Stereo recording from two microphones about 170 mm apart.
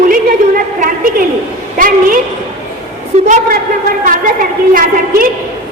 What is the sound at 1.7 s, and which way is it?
Speech, 55° right (ahead or behind).